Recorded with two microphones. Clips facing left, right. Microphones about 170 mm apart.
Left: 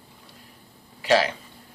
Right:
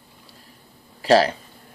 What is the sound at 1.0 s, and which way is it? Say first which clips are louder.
Speech: right 4 dB; 40° right (ahead or behind).